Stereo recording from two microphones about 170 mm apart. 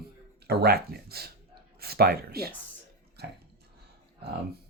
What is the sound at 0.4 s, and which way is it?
Speech, 70° right (ahead or behind).